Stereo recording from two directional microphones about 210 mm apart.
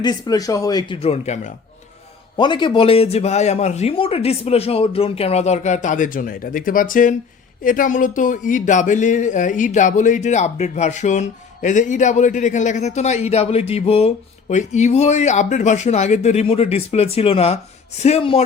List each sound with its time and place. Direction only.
0.0 s speech: 20° left (ahead or behind)
2.4 s speech: 20° left (ahead or behind)